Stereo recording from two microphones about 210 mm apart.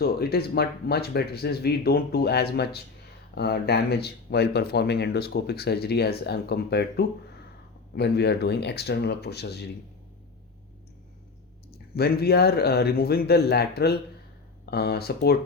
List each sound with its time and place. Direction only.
0.0 s speech: 50° left (ahead or behind)
11.9 s speech: 50° left (ahead or behind)